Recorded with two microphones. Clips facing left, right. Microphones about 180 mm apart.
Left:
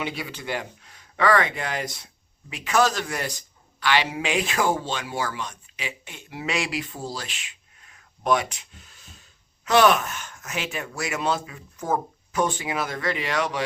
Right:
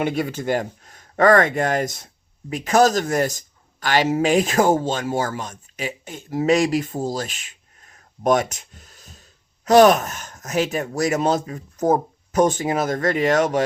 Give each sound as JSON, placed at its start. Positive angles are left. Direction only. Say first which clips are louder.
{"t": 0.0, "sound": "a man's voice", "louder": "right 9 dB", "side_deg": -50}